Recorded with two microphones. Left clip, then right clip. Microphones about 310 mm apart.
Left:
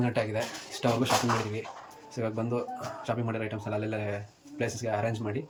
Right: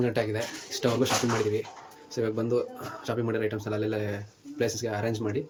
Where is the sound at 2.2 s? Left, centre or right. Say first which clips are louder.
Right 4 dB; centre.